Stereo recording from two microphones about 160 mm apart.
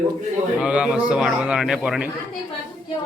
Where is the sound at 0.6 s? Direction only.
5° right (ahead or behind).